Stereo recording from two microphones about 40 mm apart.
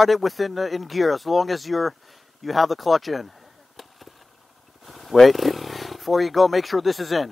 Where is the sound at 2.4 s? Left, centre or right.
Centre.